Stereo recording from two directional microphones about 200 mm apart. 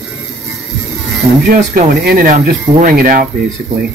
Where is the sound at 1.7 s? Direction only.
45° right (ahead or behind).